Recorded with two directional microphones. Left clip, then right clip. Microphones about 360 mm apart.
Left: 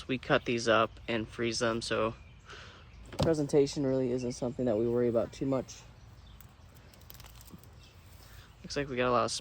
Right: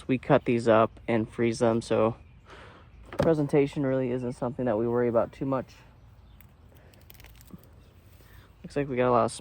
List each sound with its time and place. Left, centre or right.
0.0 s speech: centre
8.6 s speech: centre